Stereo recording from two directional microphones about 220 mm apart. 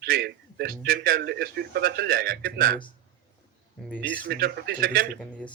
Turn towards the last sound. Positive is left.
turn(degrees=-45)  # may be behind; listen again after turning